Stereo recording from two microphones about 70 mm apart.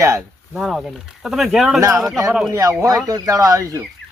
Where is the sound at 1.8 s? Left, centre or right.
Right.